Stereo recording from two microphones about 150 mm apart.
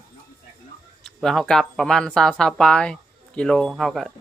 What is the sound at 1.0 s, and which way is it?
Speech, centre (ahead or behind).